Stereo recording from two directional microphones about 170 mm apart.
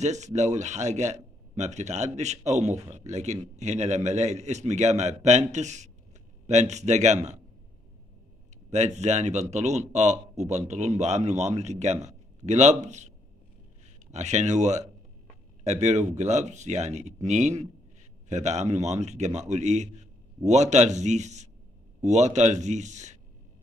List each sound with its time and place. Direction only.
0.0 s a man's voice: 45° right (ahead or behind)
8.6 s a man's voice: 40° right (ahead or behind)
14.1 s a man's voice: 45° right (ahead or behind)